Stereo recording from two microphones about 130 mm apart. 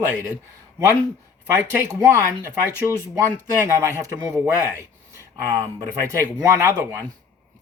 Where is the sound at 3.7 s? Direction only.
25° right (ahead or behind).